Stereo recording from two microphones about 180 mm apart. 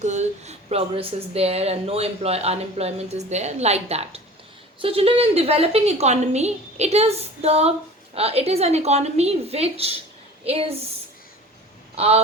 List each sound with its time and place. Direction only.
0.0 s speech: 40° right (ahead or behind)
11.9 s speech: 35° right (ahead or behind)